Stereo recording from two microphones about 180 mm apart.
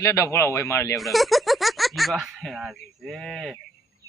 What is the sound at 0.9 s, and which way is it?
Speech, centre (ahead or behind).